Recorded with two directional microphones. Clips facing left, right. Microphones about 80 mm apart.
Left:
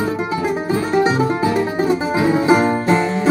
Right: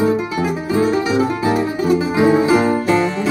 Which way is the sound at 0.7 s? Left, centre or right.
Left.